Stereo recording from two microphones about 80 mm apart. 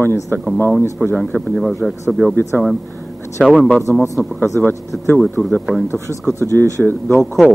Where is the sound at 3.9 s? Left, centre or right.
Centre.